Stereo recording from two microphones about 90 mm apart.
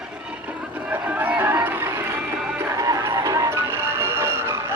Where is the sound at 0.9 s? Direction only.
20° right (ahead or behind).